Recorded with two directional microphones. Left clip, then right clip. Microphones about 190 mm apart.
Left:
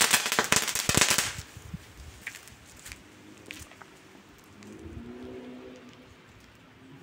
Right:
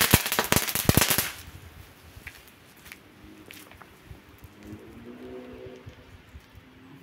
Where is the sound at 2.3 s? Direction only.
45° left (ahead or behind).